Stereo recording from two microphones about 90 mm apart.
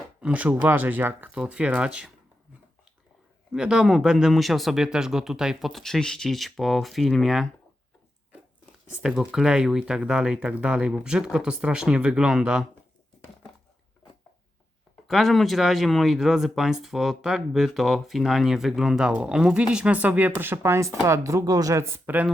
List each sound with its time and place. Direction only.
0.2 s speech: 10° right (ahead or behind)
0.4 s speech: 25° right (ahead or behind)
3.5 s speech: 5° right (ahead or behind)
9.0 s speech: 5° right (ahead or behind)
15.0 s speech: centre (ahead or behind); by 22.3 s 20° right (ahead or behind)